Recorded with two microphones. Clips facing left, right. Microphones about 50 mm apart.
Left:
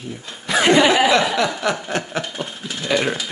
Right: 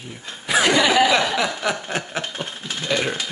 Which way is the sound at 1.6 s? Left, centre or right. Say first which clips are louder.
Left 2 dB; centre.